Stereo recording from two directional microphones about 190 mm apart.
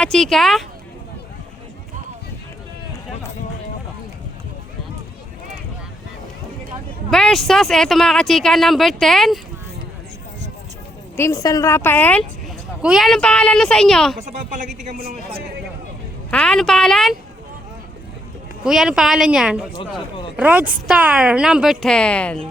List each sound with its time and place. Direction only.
0.0 s speech: 5° left (ahead or behind)
7.1 s speech: centre (ahead or behind)
11.2 s a woman's voice: 15° left (ahead or behind)
12.8 s speech: centre (ahead or behind)
14.8 s a man's voice: 50° right (ahead or behind)
16.3 s a woman's voice: 5° left (ahead or behind)
18.6 s speech: centre (ahead or behind)